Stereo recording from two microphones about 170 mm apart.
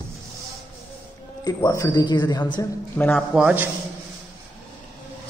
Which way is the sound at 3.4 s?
5° right (ahead or behind).